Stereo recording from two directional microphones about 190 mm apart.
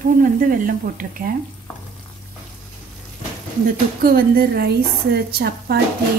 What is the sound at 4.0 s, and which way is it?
A woman's voice, 55° right (ahead or behind).